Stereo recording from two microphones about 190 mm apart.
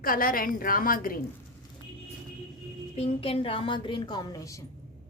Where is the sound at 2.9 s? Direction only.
30° left (ahead or behind).